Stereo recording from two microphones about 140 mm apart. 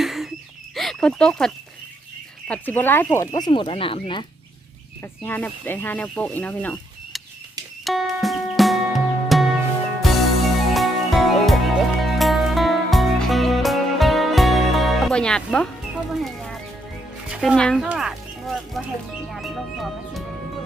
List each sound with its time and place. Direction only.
0.0 s a sound: centre (ahead or behind)
0.8 s speech: centre (ahead or behind); by 3.4 s 20° left (ahead or behind)
3.4 s speech: 35° left (ahead or behind)
5.2 s speech: 15° left (ahead or behind)
7.9 s music: centre (ahead or behind)
19.3 s speech: centre (ahead or behind)